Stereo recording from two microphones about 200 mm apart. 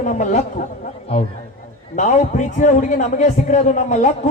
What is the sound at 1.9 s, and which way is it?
A man's voice, 35° left (ahead or behind).